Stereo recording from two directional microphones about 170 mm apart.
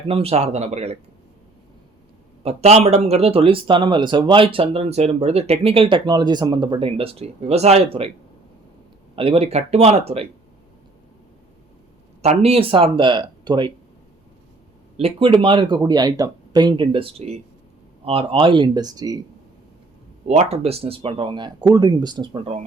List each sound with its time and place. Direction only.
0.1 s speech: 35° right (ahead or behind)
2.4 s speech: 40° right (ahead or behind)
9.1 s speech: 35° right (ahead or behind)
12.2 s speech: 40° right (ahead or behind)
14.9 s speech: 35° right (ahead or behind)
20.2 s speech: 40° right (ahead or behind)